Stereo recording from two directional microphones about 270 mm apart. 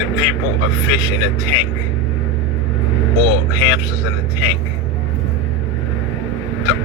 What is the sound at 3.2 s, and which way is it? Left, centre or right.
Speech, left.